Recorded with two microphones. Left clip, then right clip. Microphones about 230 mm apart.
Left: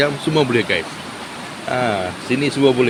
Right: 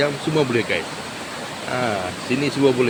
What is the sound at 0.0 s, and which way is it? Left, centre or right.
Speech, left.